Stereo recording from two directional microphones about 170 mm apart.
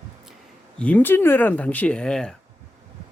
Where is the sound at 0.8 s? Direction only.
10° left (ahead or behind).